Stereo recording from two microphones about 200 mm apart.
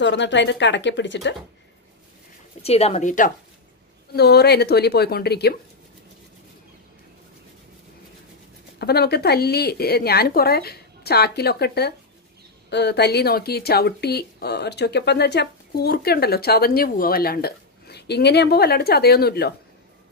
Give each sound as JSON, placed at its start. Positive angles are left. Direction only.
{"t": 0.0, "sound": "speech", "side_deg": 60}
{"t": 2.6, "sound": "a woman's voice", "side_deg": 30}
{"t": 4.1, "sound": "speech", "side_deg": 55}
{"t": 8.7, "sound": "speech", "side_deg": 55}